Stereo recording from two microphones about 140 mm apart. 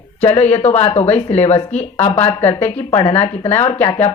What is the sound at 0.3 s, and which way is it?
Speech, 50° left (ahead or behind).